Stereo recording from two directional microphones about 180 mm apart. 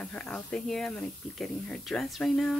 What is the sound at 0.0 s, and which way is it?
Speech, 5° left (ahead or behind).